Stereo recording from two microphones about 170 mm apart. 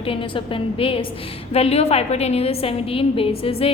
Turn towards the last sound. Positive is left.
turn(degrees=35)  # may be behind; listen again after turning